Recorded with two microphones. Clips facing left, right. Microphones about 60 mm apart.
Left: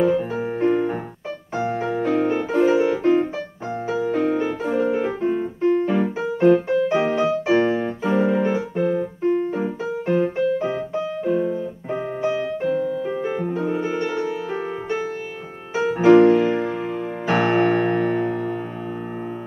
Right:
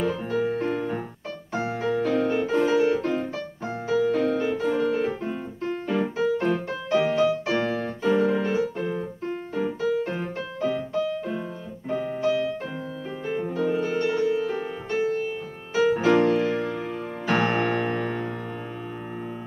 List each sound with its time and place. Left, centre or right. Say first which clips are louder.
0.0 s music: left 5 dB; left
3.9 s piano: left 1 dB; left
14.2 s music: right 1 dB; centre
15.7 s music: left 6 dB; left
17.3 s music: left 5 dB; centre